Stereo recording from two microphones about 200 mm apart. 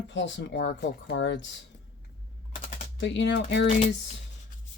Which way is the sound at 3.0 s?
65° left (ahead or behind).